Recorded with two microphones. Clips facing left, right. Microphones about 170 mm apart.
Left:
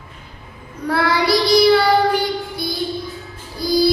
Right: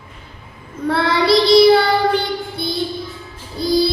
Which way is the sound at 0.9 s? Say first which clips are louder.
Right 2 dB; 25° right (ahead or behind).